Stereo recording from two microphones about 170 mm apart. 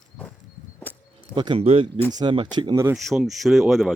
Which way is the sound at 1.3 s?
30° right (ahead or behind).